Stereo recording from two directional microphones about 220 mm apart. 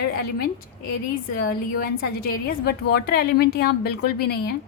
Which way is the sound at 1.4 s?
45° left (ahead or behind).